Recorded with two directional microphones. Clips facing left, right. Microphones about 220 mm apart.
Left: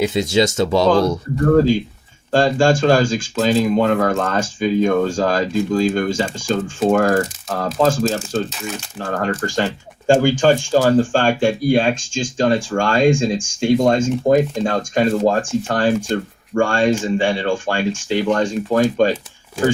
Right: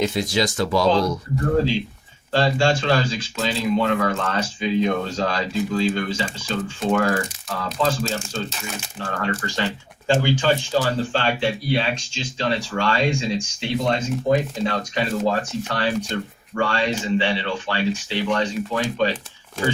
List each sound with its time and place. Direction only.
0.1 s speech: 25° left (ahead or behind)
1.5 s speech: 45° left (ahead or behind)